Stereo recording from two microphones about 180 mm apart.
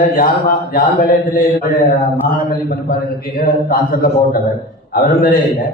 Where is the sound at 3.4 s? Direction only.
50° left (ahead or behind).